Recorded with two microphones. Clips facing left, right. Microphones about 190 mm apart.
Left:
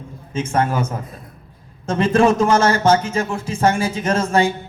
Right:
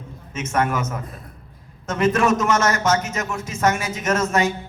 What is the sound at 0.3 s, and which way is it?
A man's voice, 30° left (ahead or behind).